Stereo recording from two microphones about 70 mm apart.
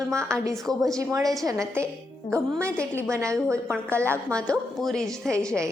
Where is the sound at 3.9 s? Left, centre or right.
Right.